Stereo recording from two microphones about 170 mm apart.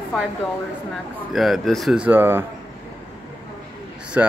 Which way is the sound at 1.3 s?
Centre (ahead or behind).